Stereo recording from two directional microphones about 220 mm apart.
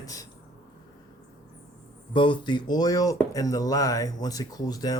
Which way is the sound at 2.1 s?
20° left (ahead or behind).